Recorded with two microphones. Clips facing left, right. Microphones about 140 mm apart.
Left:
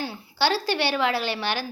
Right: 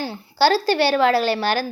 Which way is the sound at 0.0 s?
35° right (ahead or behind).